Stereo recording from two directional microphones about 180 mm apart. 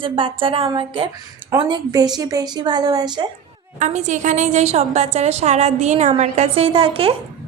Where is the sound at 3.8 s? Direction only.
40° right (ahead or behind).